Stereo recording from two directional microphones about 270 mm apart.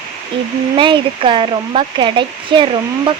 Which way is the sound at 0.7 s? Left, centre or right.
Centre.